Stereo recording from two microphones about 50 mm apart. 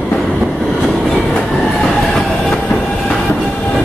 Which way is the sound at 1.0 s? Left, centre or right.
Centre.